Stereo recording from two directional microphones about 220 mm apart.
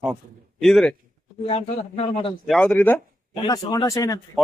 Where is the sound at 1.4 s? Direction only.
25° left (ahead or behind).